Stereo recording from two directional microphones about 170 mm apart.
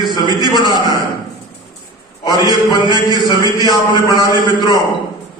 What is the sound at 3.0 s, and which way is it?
A man's voice, 20° left (ahead or behind).